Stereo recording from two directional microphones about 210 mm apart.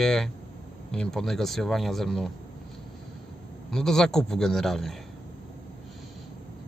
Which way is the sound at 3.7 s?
Centre (ahead or behind).